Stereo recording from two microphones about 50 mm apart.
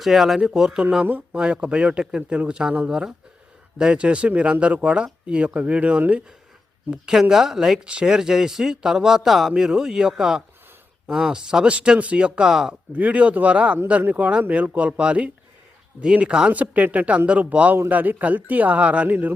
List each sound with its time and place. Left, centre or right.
0.0 s a man's voice: centre
3.8 s speech: centre
6.9 s a man's voice: centre
12.5 s a man's voice: centre
12.9 s speech: right
16.5 s speech: right
17.8 s speech: right